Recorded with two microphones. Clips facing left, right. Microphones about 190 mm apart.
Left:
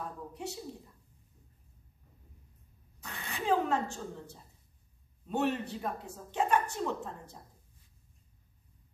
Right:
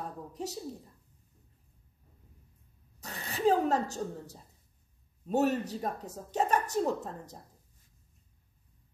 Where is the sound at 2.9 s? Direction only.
40° right (ahead or behind).